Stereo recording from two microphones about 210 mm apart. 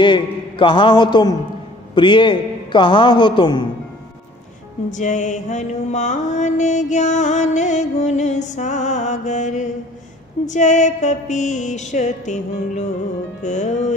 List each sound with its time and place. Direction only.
0.0 s a man's voice: 25° left (ahead or behind)
4.9 s mantra: 35° left (ahead or behind)